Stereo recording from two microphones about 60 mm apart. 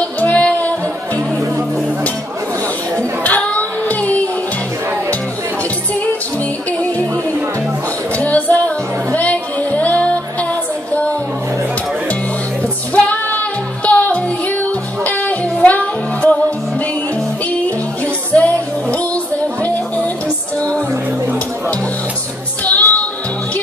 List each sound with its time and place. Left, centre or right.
0.0 s music: left
3.0 s a sound: left
8.2 s music: left
12.9 s music: left
18.3 s music: left
22.7 s music: left